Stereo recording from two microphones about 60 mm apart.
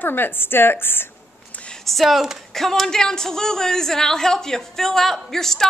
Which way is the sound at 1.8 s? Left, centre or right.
Centre.